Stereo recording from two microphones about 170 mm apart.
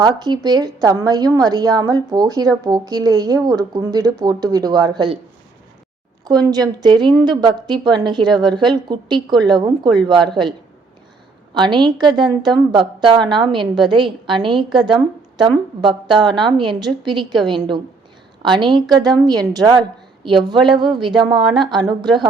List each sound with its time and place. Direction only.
0.0 s a woman's voice: 25° right (ahead or behind)
6.2 s a woman's voice: 25° right (ahead or behind)
11.5 s a woman's voice: 25° right (ahead or behind)